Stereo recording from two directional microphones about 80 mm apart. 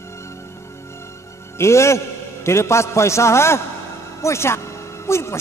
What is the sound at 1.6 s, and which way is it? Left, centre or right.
A man's voice, left.